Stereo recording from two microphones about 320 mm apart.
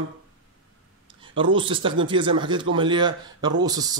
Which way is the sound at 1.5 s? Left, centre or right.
Centre.